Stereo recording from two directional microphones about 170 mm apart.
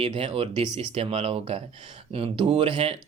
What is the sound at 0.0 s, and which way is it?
Speech, 30° right (ahead or behind).